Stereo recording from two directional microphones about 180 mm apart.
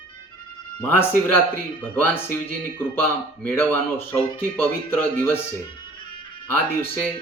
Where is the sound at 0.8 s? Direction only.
10° left (ahead or behind).